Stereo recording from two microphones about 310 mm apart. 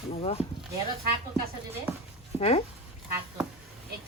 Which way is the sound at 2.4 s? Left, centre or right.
Centre.